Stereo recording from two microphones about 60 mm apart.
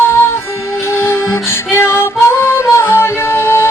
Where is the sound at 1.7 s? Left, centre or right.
Left.